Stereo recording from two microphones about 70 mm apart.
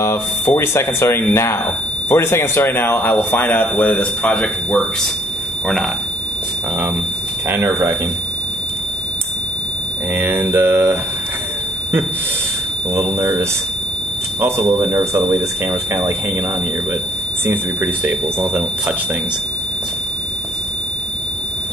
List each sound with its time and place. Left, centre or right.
0.0 s speech: left; by 4.8 s centre
7.4 s speech: right
10.1 s speech: right
12.9 s speech: right
18.0 s speech: right